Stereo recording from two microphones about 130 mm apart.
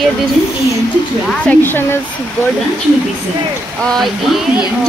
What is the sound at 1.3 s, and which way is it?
Speech, 15° left (ahead or behind).